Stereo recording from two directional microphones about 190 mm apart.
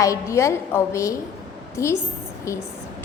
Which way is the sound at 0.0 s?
15° left (ahead or behind).